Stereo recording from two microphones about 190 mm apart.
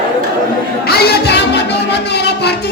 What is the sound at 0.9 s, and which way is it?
Music, 55° left (ahead or behind).